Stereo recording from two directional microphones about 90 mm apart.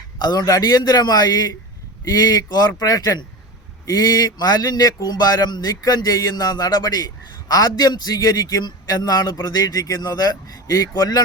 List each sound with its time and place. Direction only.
0.2 s speech: 50° left (ahead or behind)